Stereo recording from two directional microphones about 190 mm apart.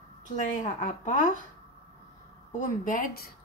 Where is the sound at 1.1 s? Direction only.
40° left (ahead or behind).